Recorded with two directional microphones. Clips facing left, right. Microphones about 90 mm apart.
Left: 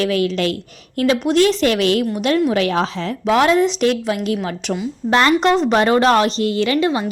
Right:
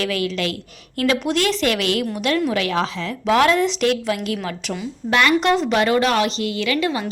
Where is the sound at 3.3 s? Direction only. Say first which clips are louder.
Left 2 dB; 20° left (ahead or behind).